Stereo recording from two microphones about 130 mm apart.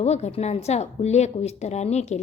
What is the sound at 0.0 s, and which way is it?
A woman's voice, 55° left (ahead or behind).